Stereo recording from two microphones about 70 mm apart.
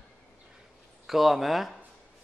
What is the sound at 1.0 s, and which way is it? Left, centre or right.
Speech, centre.